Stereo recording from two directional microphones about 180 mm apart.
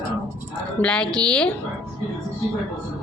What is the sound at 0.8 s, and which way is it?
Speech, 5° left (ahead or behind).